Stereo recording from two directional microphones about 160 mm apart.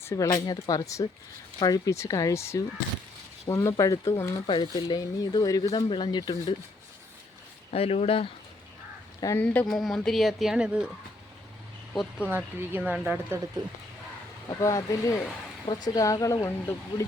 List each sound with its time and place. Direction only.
0.0 s speech: 20° left (ahead or behind)
4.4 s speech: 30° left (ahead or behind)
6.3 s speech: 40° left (ahead or behind)
7.7 s speech: 40° left (ahead or behind)
9.2 s speech: 15° left (ahead or behind); by 10.9 s 5° right (ahead or behind)
12.5 s speech: 10° right (ahead or behind)
14.6 s speech: 20° left (ahead or behind)